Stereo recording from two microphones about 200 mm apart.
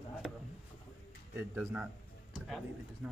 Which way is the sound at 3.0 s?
Centre (ahead or behind).